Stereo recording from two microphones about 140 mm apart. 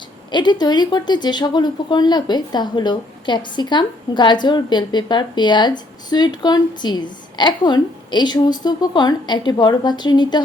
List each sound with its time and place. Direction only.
0.3 s speech: 30° left (ahead or behind)